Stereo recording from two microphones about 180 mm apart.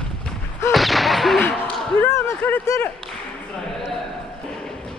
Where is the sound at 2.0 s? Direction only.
15° left (ahead or behind).